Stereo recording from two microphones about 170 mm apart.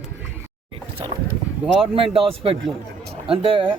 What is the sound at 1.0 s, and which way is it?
Speech, 25° right (ahead or behind).